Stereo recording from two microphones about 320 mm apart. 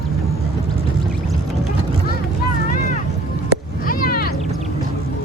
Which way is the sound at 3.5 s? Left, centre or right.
Left.